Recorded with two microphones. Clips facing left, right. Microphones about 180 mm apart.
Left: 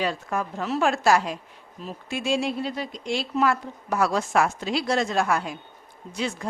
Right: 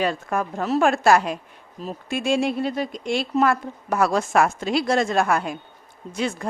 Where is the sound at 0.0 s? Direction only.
55° right (ahead or behind).